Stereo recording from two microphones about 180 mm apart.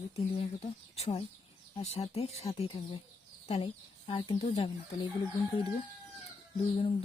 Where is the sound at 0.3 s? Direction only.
35° left (ahead or behind).